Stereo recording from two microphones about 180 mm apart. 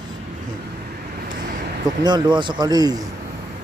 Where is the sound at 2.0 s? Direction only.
25° right (ahead or behind).